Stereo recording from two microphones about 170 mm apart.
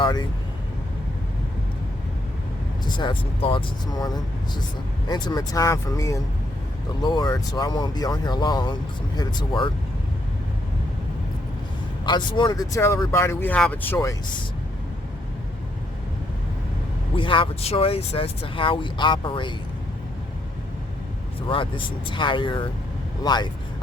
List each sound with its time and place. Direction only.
0.0 s speech: 25° left (ahead or behind)
2.8 s speech: 25° left (ahead or behind)
12.0 s speech: 25° left (ahead or behind)
17.2 s speech: 30° left (ahead or behind)
21.4 s speech: 30° left (ahead or behind)